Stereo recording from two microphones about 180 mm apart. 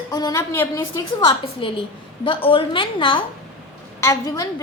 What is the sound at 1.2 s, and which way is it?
A woman's voice, 30° left (ahead or behind).